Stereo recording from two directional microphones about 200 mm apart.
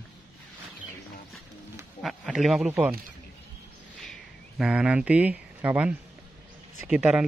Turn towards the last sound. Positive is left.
turn(degrees=-5)  # may be behind; listen again after turning